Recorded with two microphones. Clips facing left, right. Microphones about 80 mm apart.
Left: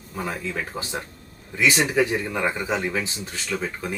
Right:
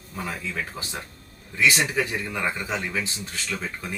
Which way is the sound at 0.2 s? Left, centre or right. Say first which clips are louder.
Left 2 dB; centre.